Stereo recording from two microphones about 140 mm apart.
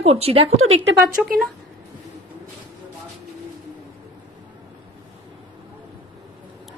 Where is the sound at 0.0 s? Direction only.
45° right (ahead or behind).